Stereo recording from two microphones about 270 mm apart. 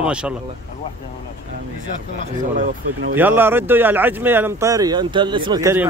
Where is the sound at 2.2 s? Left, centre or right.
Right.